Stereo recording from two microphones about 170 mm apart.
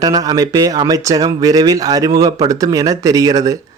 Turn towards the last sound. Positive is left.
turn(degrees=-20)  # may be behind; listen again after turning